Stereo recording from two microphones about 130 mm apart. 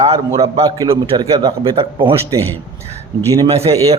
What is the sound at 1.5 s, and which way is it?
Speech, 45° right (ahead or behind).